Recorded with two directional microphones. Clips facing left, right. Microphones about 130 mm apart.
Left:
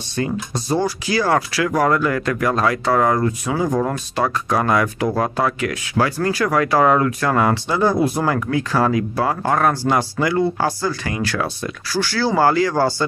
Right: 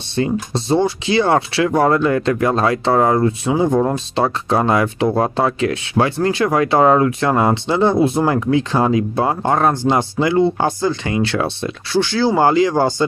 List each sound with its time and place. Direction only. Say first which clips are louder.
0.1 s speech: right 4 dB; 25° right (ahead or behind)